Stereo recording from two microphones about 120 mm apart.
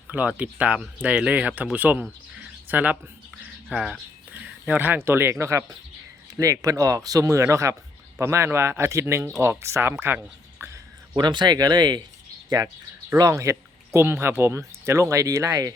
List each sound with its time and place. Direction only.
0.1 s speech: 10° right (ahead or behind)
3.7 s speech: centre (ahead or behind)
4.3 s speech: 15° right (ahead or behind)
10.6 s a sound: 20° right (ahead or behind)
11.2 s speech: 40° right (ahead or behind)